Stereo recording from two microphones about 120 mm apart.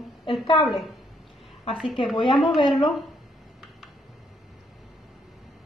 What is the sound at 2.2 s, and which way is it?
Speech, 45° left (ahead or behind).